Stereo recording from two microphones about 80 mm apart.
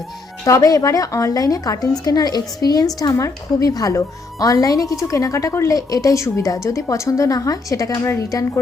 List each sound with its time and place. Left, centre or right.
0.4 s a woman's voice: left